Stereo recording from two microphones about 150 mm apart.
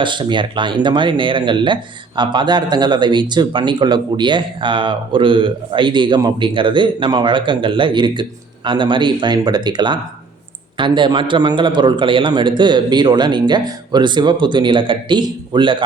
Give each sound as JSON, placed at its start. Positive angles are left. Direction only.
{"t": 0.0, "sound": "speech", "side_deg": -30}